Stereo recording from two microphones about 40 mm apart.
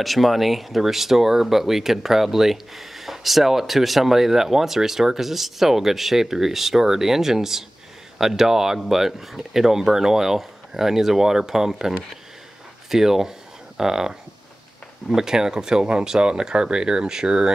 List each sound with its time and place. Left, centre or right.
0.0 s speech: centre
12.9 s speech: centre